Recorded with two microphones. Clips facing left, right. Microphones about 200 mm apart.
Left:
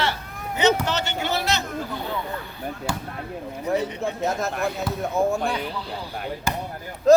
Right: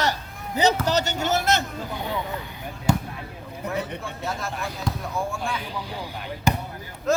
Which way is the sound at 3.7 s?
45° left (ahead or behind).